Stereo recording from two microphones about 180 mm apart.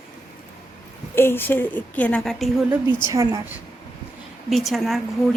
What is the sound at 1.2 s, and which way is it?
A woman's voice, 10° left (ahead or behind).